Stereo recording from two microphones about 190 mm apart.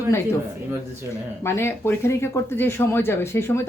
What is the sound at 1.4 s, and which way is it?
A woman's voice, 15° left (ahead or behind).